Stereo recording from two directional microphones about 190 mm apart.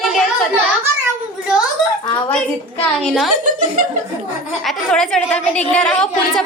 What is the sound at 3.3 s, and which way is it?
Speech, 45° right (ahead or behind).